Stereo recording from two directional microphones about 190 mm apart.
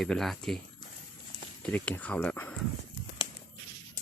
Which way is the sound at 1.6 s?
5° left (ahead or behind).